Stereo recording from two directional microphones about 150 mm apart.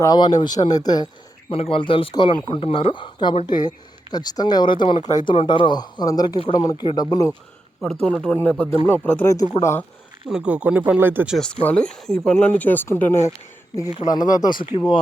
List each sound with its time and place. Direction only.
0.0 s speech: 25° left (ahead or behind)
1.5 s speech: 40° left (ahead or behind)
8.0 s speech: 5° left (ahead or behind)
10.2 s speech: 5° right (ahead or behind)
11.6 s speech: 5° left (ahead or behind); by 14.7 s 30° left (ahead or behind)